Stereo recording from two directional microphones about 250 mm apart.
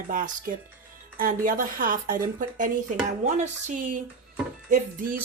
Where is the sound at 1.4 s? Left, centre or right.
Right.